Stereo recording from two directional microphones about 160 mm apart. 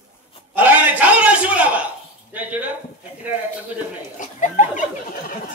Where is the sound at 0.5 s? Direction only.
10° right (ahead or behind).